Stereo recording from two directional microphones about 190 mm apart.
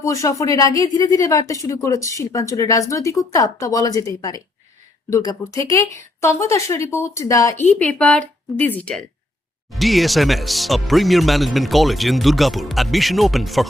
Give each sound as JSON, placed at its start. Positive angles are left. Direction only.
{"t": 0.0, "sound": "speech", "side_deg": 15}
{"t": 7.6, "sound": "speech", "side_deg": 5}